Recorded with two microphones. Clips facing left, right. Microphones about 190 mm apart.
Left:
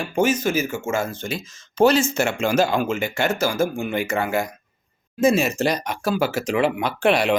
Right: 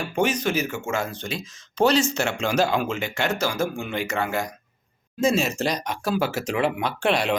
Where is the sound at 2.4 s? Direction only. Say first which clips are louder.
Left 2 dB; centre (ahead or behind).